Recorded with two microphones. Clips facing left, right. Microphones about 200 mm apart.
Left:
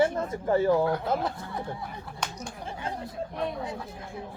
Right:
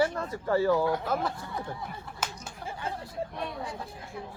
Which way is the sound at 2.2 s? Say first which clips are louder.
Left 1 dB; 5° right (ahead or behind).